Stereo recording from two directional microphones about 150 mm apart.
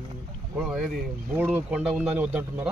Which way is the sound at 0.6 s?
Centre (ahead or behind).